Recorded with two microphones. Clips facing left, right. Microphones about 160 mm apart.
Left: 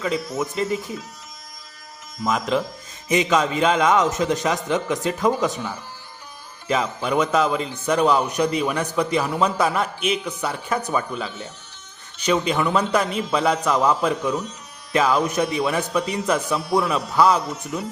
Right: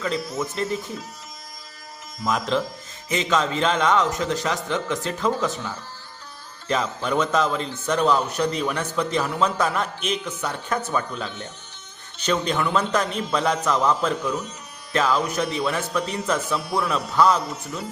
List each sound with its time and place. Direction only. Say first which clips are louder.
0.3 s a man's voice: left 2 dB; 5° left (ahead or behind)
2.2 s a man's voice: left 1 dB; 5° left (ahead or behind)